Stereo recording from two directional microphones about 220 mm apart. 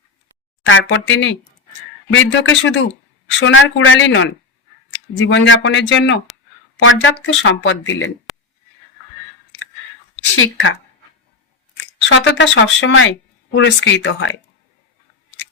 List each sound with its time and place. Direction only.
0.6 s speech: 60° left (ahead or behind)
10.3 s speech: 60° left (ahead or behind)
12.0 s speech: 55° left (ahead or behind)